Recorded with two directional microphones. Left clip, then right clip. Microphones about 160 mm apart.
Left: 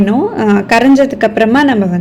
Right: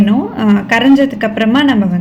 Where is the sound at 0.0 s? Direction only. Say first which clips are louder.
Left 3 dB; 35° left (ahead or behind).